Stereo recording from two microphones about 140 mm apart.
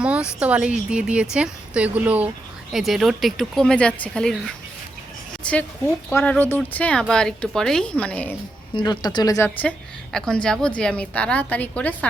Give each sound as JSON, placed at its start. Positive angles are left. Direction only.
{"t": 0.0, "sound": "a woman's voice", "side_deg": -10}
{"t": 5.4, "sound": "a sound", "side_deg": 10}
{"t": 6.1, "sound": "a woman's voice", "side_deg": 20}
{"t": 8.7, "sound": "speech", "side_deg": 30}
{"t": 9.6, "sound": "a woman's voice", "side_deg": 5}